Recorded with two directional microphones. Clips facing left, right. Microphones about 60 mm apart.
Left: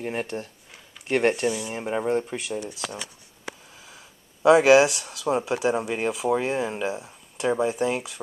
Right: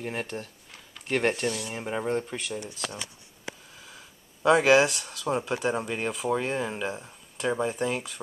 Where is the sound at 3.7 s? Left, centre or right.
Centre.